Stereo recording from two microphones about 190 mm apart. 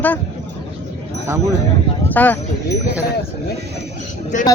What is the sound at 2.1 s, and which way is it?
Speech, 10° left (ahead or behind).